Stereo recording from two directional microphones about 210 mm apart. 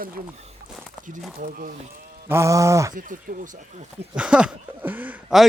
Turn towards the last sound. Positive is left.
turn(degrees=-5)  # may be behind; listen again after turning